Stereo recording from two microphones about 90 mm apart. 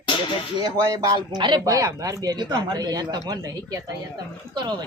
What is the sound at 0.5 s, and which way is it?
Speech, 50° right (ahead or behind).